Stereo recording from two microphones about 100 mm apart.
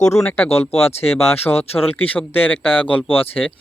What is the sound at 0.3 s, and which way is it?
Speech, 15° left (ahead or behind).